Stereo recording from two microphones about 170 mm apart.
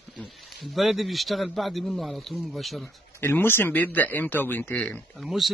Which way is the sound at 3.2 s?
15° left (ahead or behind).